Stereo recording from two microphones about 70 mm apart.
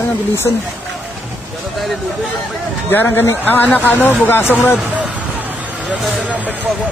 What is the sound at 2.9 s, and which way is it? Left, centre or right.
Speech, left.